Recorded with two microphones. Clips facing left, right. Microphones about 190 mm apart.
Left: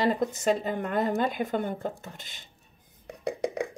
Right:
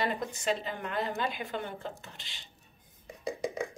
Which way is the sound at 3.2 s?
60° left (ahead or behind).